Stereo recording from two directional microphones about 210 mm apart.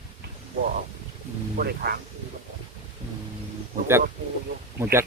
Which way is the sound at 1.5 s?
50° right (ahead or behind).